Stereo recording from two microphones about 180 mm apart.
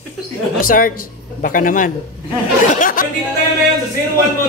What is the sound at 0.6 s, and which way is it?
A man's voice, 50° left (ahead or behind).